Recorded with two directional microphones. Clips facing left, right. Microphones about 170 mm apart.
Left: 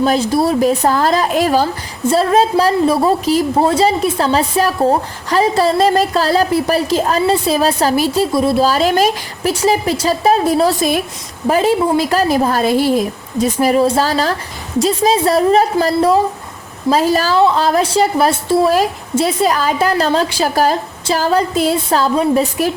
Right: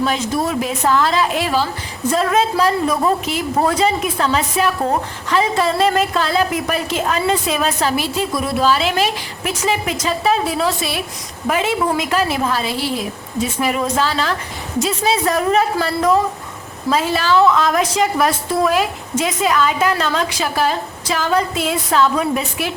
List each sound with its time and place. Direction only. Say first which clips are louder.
0.0 s a woman's voice: left 5 dB; 35° left (ahead or behind)